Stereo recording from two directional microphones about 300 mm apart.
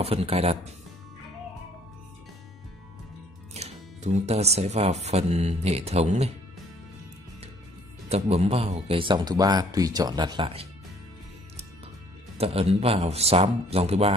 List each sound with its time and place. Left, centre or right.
0.0 s speech: centre
3.5 s speech: right
8.1 s speech: right
12.4 s speech: centre